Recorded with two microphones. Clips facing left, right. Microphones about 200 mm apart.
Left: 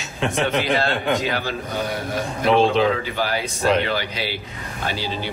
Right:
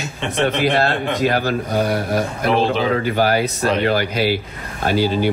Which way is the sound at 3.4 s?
Centre (ahead or behind).